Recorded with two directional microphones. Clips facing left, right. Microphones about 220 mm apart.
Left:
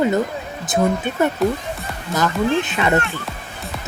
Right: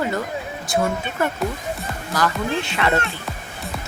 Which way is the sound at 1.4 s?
Centre (ahead or behind).